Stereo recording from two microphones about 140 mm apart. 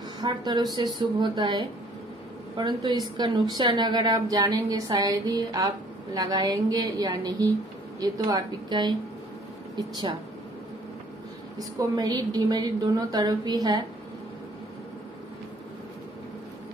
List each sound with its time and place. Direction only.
0.2 s a woman's voice: 30° right (ahead or behind)
11.5 s a woman's voice: 30° right (ahead or behind)